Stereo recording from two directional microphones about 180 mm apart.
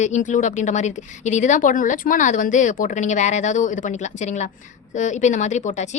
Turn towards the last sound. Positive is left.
turn(degrees=40)  # may be behind; listen again after turning